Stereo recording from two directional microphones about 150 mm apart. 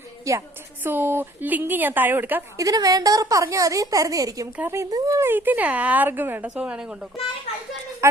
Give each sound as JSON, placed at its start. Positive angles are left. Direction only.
{"t": 0.3, "sound": "speech", "side_deg": -20}